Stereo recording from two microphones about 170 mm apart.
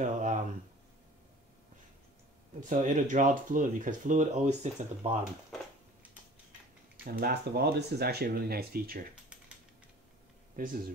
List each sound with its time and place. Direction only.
0.0 s a sound: 45° right (ahead or behind)
2.6 s speech: 50° right (ahead or behind)
7.1 s speech: 60° right (ahead or behind)
10.5 s speech: 55° right (ahead or behind)